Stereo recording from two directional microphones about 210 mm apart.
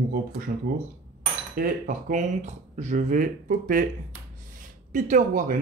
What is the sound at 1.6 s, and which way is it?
Speech, 35° right (ahead or behind).